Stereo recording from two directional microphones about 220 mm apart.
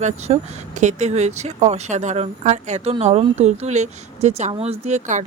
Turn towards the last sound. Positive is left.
turn(degrees=-35)  # may be behind; listen again after turning